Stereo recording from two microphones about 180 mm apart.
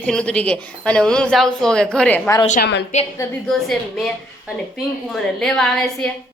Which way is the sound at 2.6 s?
70° left (ahead or behind).